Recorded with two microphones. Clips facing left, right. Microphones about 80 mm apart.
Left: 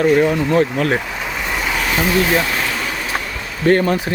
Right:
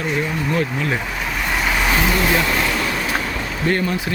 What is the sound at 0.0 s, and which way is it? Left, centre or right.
Speech, left.